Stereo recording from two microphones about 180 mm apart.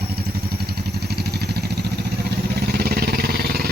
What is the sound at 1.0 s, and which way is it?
Vehicle, 65° right (ahead or behind).